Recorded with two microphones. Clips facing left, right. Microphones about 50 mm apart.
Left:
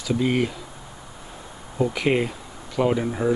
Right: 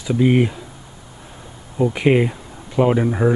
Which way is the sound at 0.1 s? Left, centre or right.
Centre.